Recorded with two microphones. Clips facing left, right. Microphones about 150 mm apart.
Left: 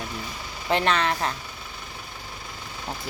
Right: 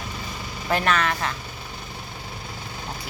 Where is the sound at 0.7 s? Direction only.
25° left (ahead or behind).